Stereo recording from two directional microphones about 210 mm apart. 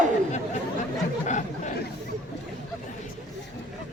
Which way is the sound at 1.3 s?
35° left (ahead or behind).